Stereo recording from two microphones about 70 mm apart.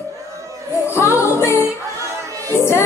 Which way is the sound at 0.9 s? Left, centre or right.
Left.